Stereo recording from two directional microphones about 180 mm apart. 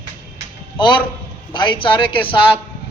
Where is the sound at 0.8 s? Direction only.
25° left (ahead or behind).